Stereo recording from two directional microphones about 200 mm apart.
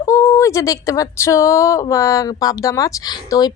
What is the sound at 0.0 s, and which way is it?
Speech, 15° left (ahead or behind).